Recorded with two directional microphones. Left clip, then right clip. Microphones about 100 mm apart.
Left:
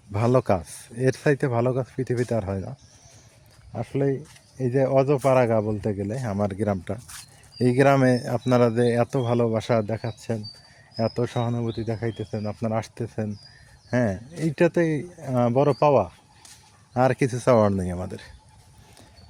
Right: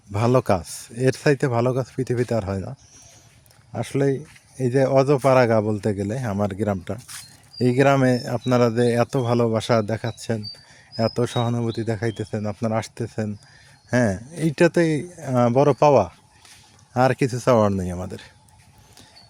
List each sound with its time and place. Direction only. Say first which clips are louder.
0.1 s speech: right 2 dB; 30° right (ahead or behind)
3.7 s speech: right 3 dB; 45° right (ahead or behind)
6.1 s speech: right 2 dB; 30° right (ahead or behind)
13.9 s speech: right 3 dB; 45° right (ahead or behind)
16.9 s speech: right 2 dB; 25° right (ahead or behind)